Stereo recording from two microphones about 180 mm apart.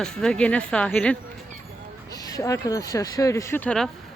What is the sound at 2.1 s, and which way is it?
Speech, 20° left (ahead or behind).